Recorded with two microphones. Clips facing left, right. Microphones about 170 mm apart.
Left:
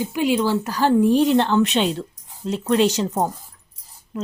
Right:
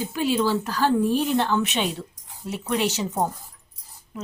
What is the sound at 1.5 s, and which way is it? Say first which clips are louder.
Speech: left 6 dB; 10° right (ahead or behind).